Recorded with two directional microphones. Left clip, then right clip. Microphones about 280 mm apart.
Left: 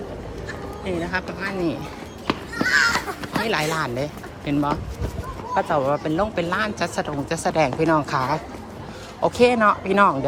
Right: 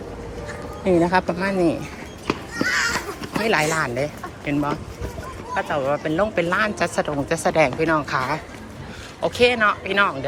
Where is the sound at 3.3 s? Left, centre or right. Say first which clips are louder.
Right 3 dB; centre.